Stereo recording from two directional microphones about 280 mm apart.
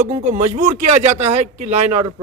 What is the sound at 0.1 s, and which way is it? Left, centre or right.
Speech, right.